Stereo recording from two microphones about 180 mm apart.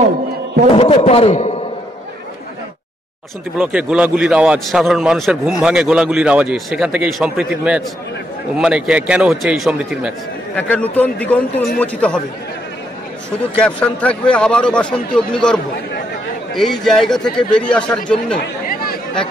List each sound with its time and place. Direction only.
0.7 s a man's voice: 35° left (ahead or behind)
3.5 s speech: 10° right (ahead or behind)
10.5 s a man's voice: 10° left (ahead or behind)
13.6 s speech: 5° left (ahead or behind)
16.8 s speech: centre (ahead or behind)
18.7 s chatter: 55° left (ahead or behind)